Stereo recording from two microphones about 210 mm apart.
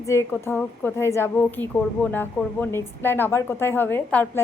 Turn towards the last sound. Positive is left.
turn(degrees=10)  # may be behind; listen again after turning